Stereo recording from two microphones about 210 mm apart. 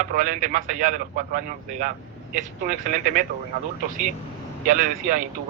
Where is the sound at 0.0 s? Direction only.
40° right (ahead or behind).